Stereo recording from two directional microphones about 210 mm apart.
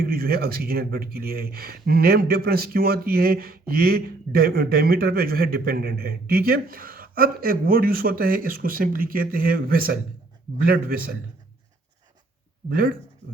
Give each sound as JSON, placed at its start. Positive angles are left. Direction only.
{"t": 0.0, "sound": "speech", "side_deg": -45}
{"t": 12.6, "sound": "speech", "side_deg": -45}